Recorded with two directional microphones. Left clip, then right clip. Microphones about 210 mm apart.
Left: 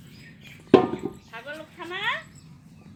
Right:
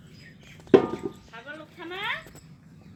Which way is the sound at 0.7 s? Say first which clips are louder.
Left 1 dB; 55° left (ahead or behind).